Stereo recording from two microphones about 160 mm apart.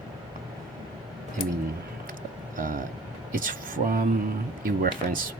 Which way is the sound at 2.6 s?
55° right (ahead or behind).